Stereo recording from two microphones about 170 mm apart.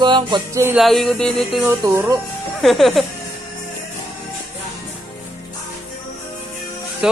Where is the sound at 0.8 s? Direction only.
Centre (ahead or behind).